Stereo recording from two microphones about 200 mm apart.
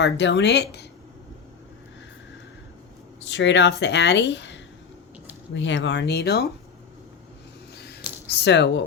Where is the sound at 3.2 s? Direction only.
60° left (ahead or behind).